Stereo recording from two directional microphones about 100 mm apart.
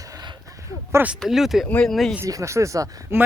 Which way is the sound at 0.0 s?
35° right (ahead or behind).